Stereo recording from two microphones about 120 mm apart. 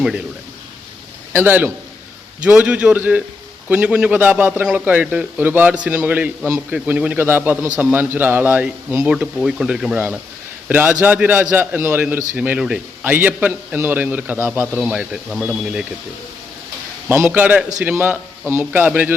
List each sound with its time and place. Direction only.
1.3 s a man's voice: 20° right (ahead or behind)
17.1 s a man's voice: 15° right (ahead or behind)